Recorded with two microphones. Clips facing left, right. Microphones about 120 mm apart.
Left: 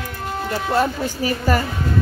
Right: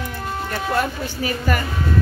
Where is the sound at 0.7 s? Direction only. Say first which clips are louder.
Left 3 dB; 35° left (ahead or behind).